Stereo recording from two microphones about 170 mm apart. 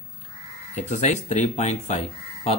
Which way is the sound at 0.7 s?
45° left (ahead or behind).